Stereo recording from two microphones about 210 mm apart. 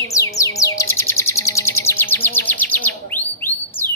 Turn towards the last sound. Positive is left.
turn(degrees=10)  # may be behind; listen again after turning